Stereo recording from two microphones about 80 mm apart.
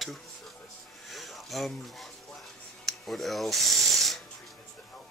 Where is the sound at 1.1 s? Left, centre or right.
Centre.